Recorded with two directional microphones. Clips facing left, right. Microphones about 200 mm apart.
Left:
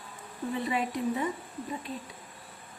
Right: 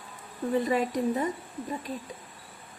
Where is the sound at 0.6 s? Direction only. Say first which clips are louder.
Right 2 dB; 40° right (ahead or behind).